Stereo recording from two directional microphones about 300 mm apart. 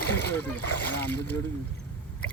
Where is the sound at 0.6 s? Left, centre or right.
Left.